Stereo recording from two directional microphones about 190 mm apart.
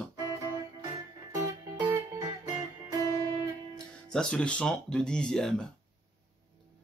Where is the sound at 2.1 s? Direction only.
25° right (ahead or behind).